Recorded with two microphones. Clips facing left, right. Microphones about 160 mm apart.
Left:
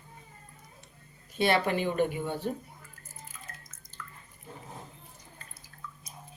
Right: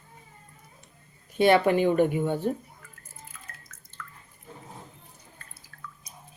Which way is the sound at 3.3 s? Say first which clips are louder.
Left 1 dB; 15° left (ahead or behind).